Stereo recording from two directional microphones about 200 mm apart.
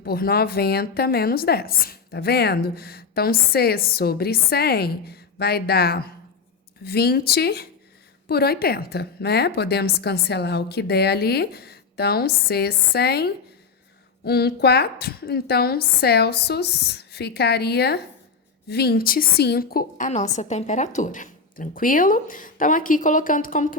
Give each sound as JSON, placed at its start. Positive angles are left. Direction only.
{"t": 0.0, "sound": "a woman's voice", "side_deg": 50}